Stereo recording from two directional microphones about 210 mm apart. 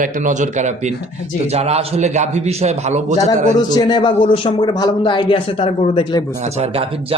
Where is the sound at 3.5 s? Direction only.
20° left (ahead or behind).